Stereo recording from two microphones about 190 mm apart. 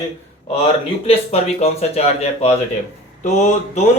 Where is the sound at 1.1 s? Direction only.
35° left (ahead or behind).